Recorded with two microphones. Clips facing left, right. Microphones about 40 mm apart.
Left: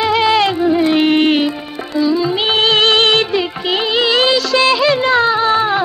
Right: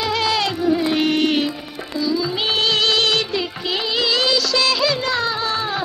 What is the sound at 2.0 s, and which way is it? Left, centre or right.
Music of bollywood, left.